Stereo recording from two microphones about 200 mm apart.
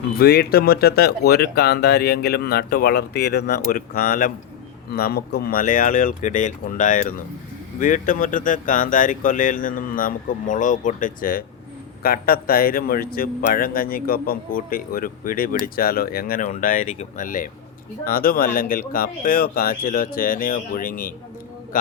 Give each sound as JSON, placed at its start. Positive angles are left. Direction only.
{"t": 0.2, "sound": "speech", "side_deg": 50}